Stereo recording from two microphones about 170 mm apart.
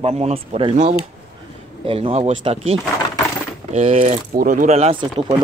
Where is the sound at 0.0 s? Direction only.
40° right (ahead or behind).